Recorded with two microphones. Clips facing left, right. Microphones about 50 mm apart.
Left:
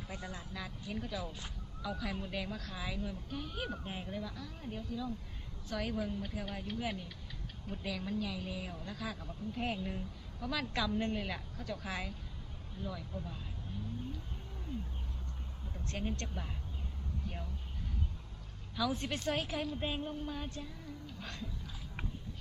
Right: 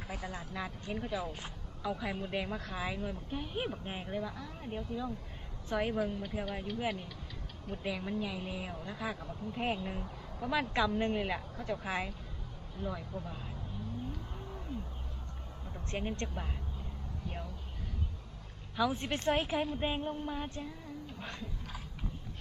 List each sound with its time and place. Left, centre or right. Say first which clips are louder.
0.3 s speech: right 4 dB; right
15.9 s speech: right 3 dB; right
18.8 s speech: right 3 dB; right